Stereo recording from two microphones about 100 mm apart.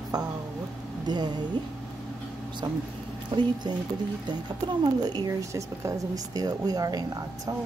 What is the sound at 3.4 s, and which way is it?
Speech, 45° right (ahead or behind).